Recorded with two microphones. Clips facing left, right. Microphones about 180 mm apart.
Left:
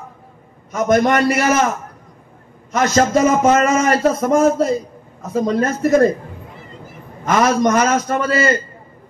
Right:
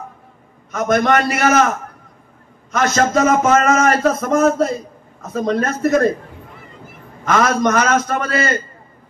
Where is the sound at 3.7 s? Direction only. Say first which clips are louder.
Even; 30° left (ahead or behind).